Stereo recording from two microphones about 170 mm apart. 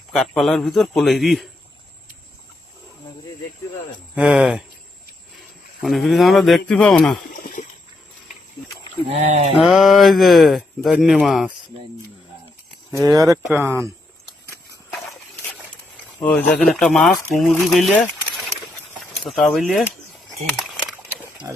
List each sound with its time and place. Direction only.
0.1 s a man's voice: centre (ahead or behind)
4.1 s a man's voice: 5° right (ahead or behind)
5.8 s a man's voice: centre (ahead or behind)
7.3 s a sound: 50° left (ahead or behind)
9.0 s speech: 40° right (ahead or behind)
9.6 s a man's voice: centre (ahead or behind)
12.9 s speech: 20° right (ahead or behind)
16.2 s a man's voice: 5° left (ahead or behind)
19.2 s a man's voice: centre (ahead or behind)
20.6 s a sound: centre (ahead or behind)
20.9 s a sound: 15° right (ahead or behind)